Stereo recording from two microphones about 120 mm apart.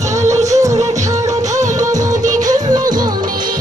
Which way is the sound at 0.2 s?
75° right (ahead or behind).